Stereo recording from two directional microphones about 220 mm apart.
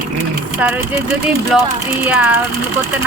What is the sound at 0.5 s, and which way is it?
Speech, 5° right (ahead or behind).